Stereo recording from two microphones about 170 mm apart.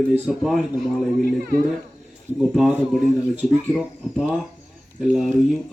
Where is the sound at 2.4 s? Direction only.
5° right (ahead or behind).